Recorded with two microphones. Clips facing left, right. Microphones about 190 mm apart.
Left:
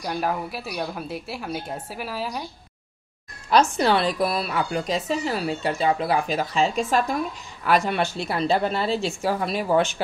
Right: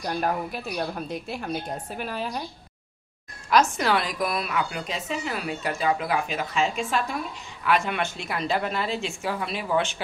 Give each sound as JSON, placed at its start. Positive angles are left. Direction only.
{"t": 0.0, "sound": "a woman's voice", "side_deg": 5}
{"t": 3.4, "sound": "a woman's voice", "side_deg": 30}